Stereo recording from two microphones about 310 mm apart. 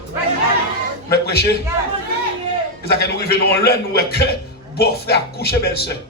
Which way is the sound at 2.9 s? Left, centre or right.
Left.